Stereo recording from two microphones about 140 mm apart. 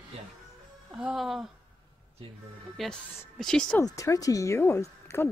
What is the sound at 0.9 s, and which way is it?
Speech, 5° right (ahead or behind).